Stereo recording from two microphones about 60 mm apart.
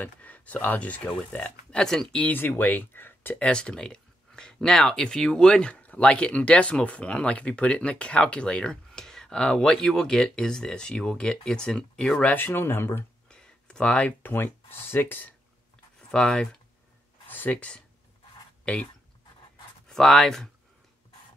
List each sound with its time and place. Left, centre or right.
0.0 s speech: left
1.7 s speech: centre
2.2 s speech: left
3.3 s speech: centre
12.4 s speech: left
13.3 s a sound: centre
14.2 s speech: left
16.0 s speech: centre
17.3 s a sound: left
17.6 s speech: centre
19.9 s speech: centre